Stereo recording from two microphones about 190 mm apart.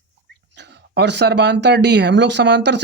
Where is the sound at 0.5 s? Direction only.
60° right (ahead or behind).